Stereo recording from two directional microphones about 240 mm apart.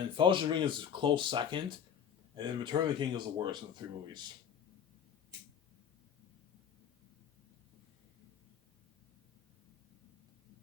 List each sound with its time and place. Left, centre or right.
0.2 s speech: right